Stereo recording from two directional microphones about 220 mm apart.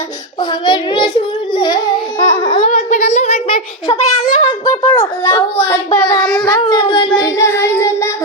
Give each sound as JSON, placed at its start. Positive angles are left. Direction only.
{"t": 0.6, "sound": "a child's voice", "side_deg": 20}
{"t": 2.4, "sound": "a sound", "side_deg": 25}
{"t": 4.7, "sound": "a child's voice", "side_deg": 20}
{"t": 6.4, "sound": "speech", "side_deg": 20}
{"t": 7.2, "sound": "child singing", "side_deg": 15}